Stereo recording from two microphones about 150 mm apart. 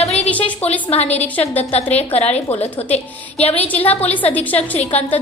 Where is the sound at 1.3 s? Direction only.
10° left (ahead or behind).